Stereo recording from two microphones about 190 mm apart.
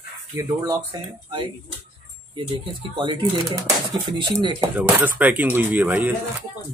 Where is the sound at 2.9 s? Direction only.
25° right (ahead or behind).